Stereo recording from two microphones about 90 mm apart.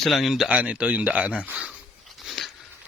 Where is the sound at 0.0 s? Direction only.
Centre (ahead or behind).